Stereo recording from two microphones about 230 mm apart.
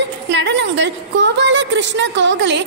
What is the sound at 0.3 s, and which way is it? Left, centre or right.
A woman's voice, right.